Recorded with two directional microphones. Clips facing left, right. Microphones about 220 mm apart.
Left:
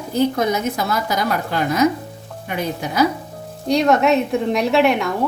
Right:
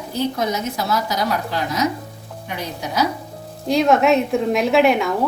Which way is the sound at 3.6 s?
Centre (ahead or behind).